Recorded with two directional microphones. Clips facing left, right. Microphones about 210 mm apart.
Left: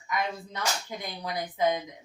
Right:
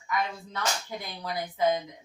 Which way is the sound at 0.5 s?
20° left (ahead or behind).